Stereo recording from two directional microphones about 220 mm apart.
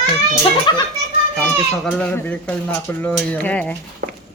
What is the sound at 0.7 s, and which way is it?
Speech, 20° left (ahead or behind).